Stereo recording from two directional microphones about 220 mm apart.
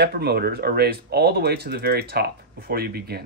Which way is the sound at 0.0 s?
45° right (ahead or behind).